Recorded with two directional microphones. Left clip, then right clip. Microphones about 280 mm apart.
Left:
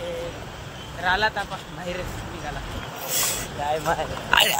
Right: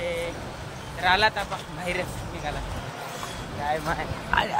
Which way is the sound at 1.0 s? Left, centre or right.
Centre.